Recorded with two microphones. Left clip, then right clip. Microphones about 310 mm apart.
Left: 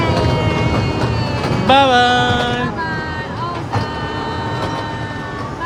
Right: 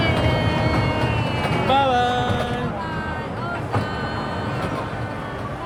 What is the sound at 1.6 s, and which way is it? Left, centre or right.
Music, left.